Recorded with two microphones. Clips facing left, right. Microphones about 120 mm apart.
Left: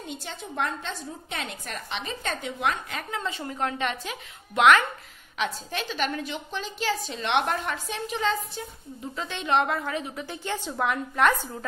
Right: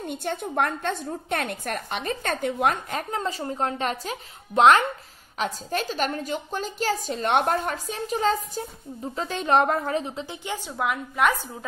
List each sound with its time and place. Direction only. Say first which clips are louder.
0.0 s a woman's voice: right 8 dB; 55° right (ahead or behind); by 11.4 s 5° right (ahead or behind)